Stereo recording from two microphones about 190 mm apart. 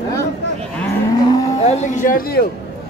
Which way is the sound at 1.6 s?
45° left (ahead or behind).